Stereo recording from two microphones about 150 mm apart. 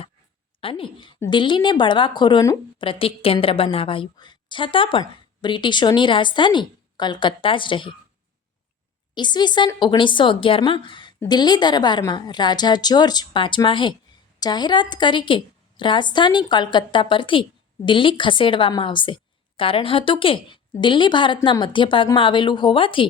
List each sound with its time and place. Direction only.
0.6 s a woman's voice: 35° left (ahead or behind)
9.1 s a woman's voice: 30° left (ahead or behind)